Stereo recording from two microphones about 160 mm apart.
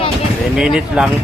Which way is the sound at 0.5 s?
5° right (ahead or behind).